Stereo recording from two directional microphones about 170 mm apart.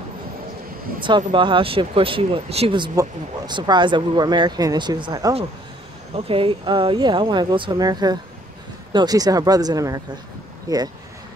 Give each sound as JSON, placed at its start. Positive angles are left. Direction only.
{"t": 1.0, "sound": "speech", "side_deg": -30}